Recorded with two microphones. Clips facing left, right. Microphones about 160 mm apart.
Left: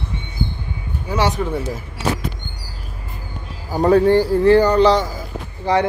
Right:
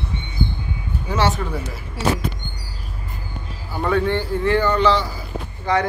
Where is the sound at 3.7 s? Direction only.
35° left (ahead or behind).